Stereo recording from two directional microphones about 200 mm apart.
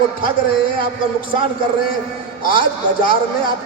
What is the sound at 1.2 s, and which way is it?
Speech, 25° right (ahead or behind).